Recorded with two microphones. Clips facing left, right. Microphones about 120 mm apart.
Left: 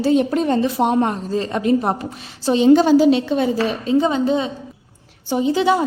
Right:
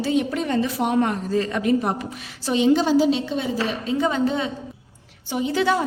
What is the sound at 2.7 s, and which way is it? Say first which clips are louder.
Speech: left 6 dB; 55° left (ahead or behind).